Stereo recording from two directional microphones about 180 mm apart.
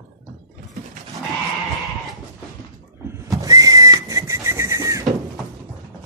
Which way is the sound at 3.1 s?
20° right (ahead or behind).